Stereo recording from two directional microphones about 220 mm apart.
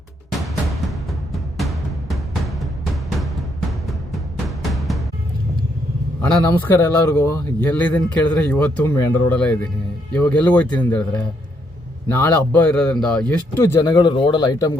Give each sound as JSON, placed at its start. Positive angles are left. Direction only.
{"t": 0.4, "sound": "music", "side_deg": 0}
{"t": 6.2, "sound": "speech", "side_deg": 5}
{"t": 13.6, "sound": "a man's voice", "side_deg": 15}